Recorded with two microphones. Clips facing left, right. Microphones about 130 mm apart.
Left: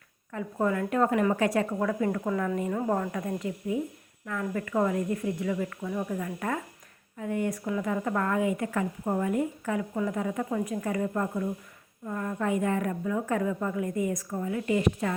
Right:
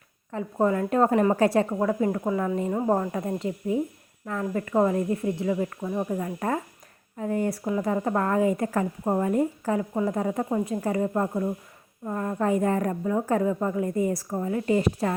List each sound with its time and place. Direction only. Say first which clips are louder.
0.3 s a woman's voice: right 4 dB; 30° right (ahead or behind)